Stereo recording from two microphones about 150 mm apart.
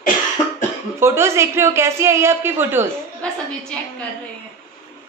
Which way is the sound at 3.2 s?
5° left (ahead or behind).